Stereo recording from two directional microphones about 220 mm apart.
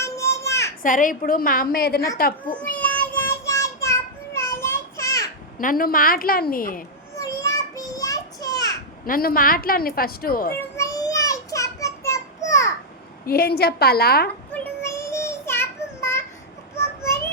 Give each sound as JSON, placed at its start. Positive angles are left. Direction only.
{"t": 0.0, "sound": "children playing", "side_deg": 15}
{"t": 0.8, "sound": "a woman's voice", "side_deg": 35}
{"t": 2.7, "sound": "child singing", "side_deg": 5}
{"t": 5.5, "sound": "a woman's voice", "side_deg": 40}
{"t": 7.2, "sound": "a sound", "side_deg": 15}
{"t": 9.0, "sound": "a woman's voice", "side_deg": 40}
{"t": 10.8, "sound": "a sound", "side_deg": 15}
{"t": 13.2, "sound": "a woman's voice", "side_deg": 45}
{"t": 14.5, "sound": "child singing", "side_deg": 10}